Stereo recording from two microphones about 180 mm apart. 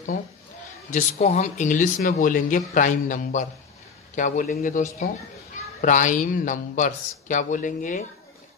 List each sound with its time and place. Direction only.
1.1 s speech: 40° left (ahead or behind)